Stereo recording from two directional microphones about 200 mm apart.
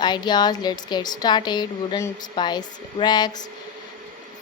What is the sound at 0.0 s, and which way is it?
Speech, 20° left (ahead or behind).